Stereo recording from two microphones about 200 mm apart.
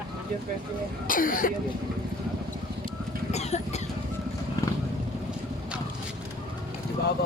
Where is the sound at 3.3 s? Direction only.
35° left (ahead or behind).